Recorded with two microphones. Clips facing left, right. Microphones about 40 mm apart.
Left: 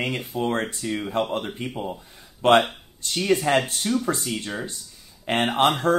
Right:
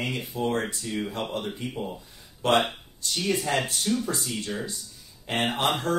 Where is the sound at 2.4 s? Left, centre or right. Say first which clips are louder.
Left 5 dB; left.